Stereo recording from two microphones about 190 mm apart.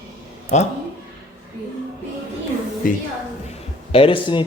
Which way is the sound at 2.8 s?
50° left (ahead or behind).